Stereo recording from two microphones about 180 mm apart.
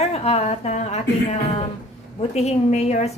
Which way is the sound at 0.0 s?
35° left (ahead or behind).